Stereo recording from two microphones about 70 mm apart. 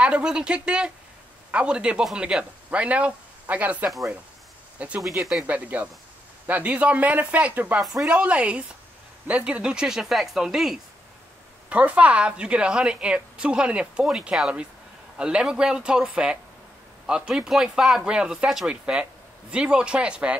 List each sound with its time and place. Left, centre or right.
0.0 s a woman's voice: centre
11.7 s a woman's voice: right